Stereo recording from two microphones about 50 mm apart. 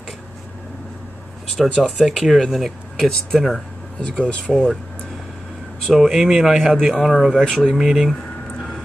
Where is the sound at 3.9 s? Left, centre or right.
Centre.